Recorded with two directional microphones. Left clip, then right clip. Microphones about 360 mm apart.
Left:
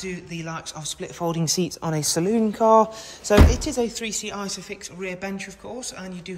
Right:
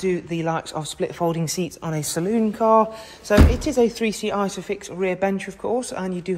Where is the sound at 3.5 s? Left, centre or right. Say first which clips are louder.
Right 5 dB; left.